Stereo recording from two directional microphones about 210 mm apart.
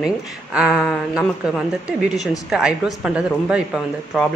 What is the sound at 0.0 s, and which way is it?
Speech, 5° right (ahead or behind).